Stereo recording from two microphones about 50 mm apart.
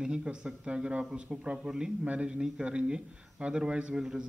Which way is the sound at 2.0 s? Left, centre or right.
Right.